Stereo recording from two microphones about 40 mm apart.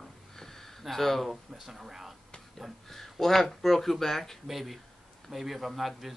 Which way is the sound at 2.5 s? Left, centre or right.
Centre.